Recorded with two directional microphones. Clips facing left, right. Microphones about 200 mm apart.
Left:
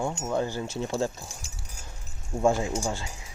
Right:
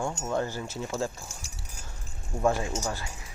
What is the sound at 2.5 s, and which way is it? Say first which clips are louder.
Speech: left 2 dB; 20° left (ahead or behind).